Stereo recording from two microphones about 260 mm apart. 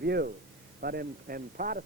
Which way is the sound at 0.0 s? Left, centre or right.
Right.